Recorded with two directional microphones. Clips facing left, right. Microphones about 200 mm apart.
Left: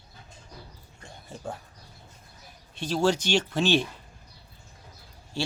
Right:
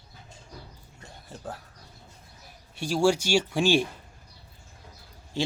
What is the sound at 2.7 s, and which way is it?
Speech, 10° right (ahead or behind).